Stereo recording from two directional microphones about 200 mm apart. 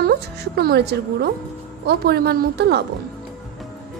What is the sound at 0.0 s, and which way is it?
A woman's voice, 50° right (ahead or behind).